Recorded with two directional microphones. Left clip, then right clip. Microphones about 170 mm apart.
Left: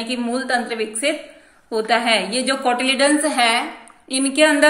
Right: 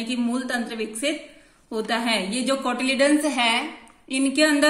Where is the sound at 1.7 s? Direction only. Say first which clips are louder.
Left 7 dB; 40° right (ahead or behind).